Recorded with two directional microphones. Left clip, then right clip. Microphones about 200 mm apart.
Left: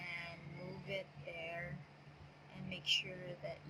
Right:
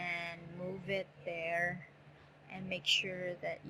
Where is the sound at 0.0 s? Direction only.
35° right (ahead or behind).